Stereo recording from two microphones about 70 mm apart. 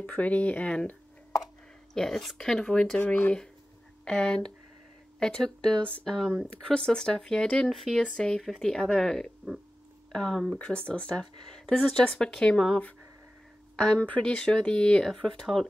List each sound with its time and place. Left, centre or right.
0.0 s speech: left
2.0 s speech: centre; by 3.3 s left
4.0 s speech: centre
10.6 s speech: centre